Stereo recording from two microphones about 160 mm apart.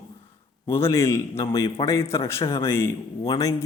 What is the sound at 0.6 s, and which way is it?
A man's voice, 15° left (ahead or behind).